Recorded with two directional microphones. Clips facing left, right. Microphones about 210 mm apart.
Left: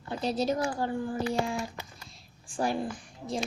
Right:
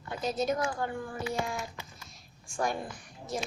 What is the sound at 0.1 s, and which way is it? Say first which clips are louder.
Speech: left 2 dB; 35° left (ahead or behind).